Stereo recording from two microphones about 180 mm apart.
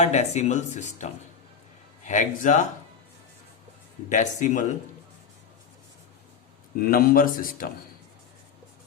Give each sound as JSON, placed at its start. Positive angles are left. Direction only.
{"t": 0.0, "sound": "speech", "side_deg": 40}
{"t": 4.1, "sound": "speech", "side_deg": 40}
{"t": 6.7, "sound": "speech", "side_deg": 55}